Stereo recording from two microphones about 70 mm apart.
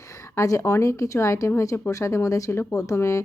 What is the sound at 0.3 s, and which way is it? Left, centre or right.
A woman's voice, left.